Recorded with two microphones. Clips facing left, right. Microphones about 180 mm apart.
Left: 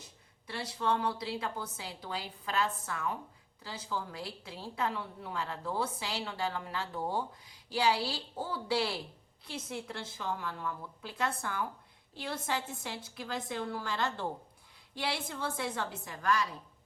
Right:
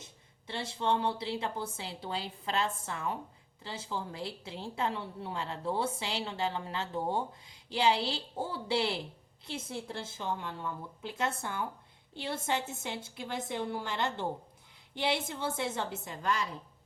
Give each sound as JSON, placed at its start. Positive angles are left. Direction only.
{"t": 0.4, "sound": "a woman's voice", "side_deg": -25}